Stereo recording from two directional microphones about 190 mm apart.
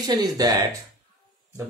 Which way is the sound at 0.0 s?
20° right (ahead or behind).